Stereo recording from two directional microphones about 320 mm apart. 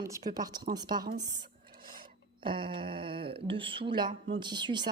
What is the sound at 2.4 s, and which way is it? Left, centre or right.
Speech, centre.